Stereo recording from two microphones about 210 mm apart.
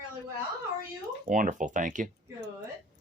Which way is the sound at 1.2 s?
40° right (ahead or behind).